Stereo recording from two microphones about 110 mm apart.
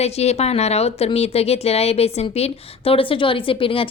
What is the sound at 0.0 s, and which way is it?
A woman's voice, 75° left (ahead or behind).